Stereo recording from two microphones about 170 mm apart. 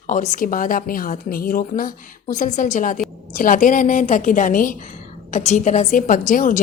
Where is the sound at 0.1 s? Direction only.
50° left (ahead or behind).